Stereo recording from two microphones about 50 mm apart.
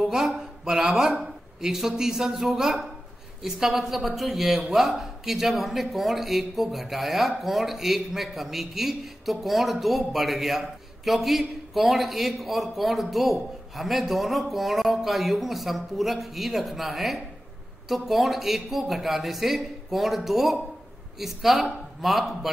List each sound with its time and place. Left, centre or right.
0.0 s speech: centre